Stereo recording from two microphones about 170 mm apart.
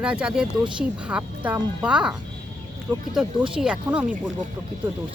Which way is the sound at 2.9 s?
20° right (ahead or behind).